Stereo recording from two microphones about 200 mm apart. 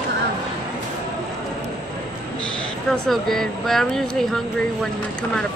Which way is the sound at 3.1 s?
Centre (ahead or behind).